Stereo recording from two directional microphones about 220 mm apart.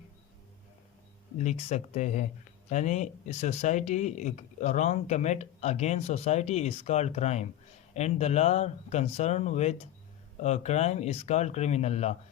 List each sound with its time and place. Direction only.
1.4 s speech: 30° left (ahead or behind)